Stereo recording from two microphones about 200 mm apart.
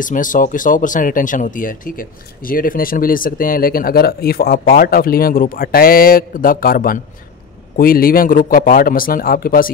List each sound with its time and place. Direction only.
0.0 s speech: 40° left (ahead or behind)